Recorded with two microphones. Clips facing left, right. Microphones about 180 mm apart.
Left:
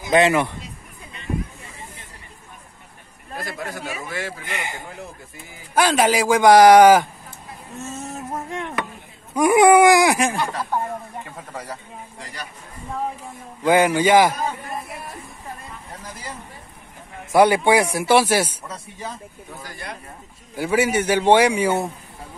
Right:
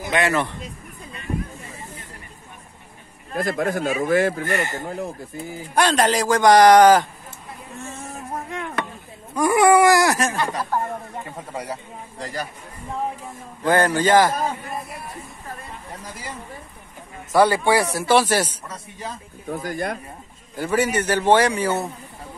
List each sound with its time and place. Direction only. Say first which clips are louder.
0.3 s a man's voice: left 2 dB; 10° left (ahead or behind)
3.3 s a man's voice: right 8 dB; 50° right (ahead or behind)
4.5 s a man's voice: right 7 dB; 15° left (ahead or behind)
4.8 s speech: right 8 dB; 40° right (ahead or behind)
5.8 s a man's voice: left 1 dB; 5° left (ahead or behind)
9.3 s a man's voice: left 2 dB; 15° left (ahead or behind)
10.5 s speech: even; 10° right (ahead or behind)
13.7 s a man's voice: left 2 dB; 10° left (ahead or behind)
17.3 s a man's voice: left 2 dB; 15° left (ahead or behind)
19.5 s a man's voice: right 10 dB; 50° right (ahead or behind)
20.5 s a man's voice: left 1 dB; 10° left (ahead or behind)